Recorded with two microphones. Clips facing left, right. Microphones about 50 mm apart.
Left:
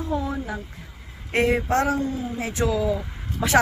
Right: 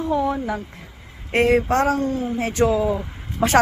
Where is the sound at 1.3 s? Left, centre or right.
Right.